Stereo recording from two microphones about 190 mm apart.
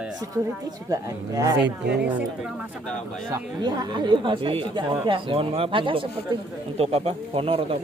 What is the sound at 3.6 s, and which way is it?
Speech, 25° right (ahead or behind).